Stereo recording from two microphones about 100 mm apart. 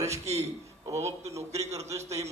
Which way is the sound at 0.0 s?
90° right.